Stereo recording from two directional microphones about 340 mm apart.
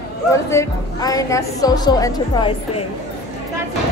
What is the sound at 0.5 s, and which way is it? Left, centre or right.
Speech, centre.